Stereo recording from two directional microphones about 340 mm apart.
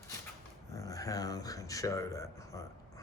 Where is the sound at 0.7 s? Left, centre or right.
Centre.